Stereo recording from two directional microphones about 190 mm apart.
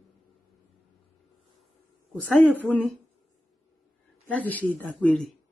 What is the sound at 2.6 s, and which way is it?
Speech, 5° left (ahead or behind).